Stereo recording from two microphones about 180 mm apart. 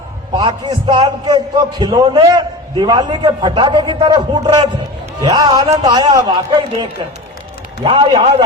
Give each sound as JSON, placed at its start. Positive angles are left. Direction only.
{"t": 0.3, "sound": "a man's voice", "side_deg": -25}
{"t": 7.9, "sound": "a man's voice", "side_deg": -30}